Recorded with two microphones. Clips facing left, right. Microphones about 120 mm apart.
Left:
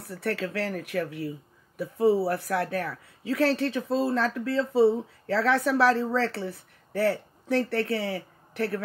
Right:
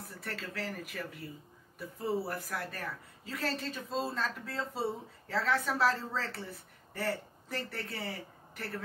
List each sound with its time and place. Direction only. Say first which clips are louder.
0.0 s speech: left 12 dB; 70° left (ahead or behind)